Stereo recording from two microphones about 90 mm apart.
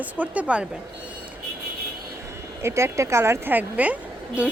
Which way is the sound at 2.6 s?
30° right (ahead or behind).